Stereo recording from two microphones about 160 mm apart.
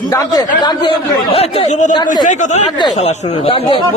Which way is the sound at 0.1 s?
25° left (ahead or behind).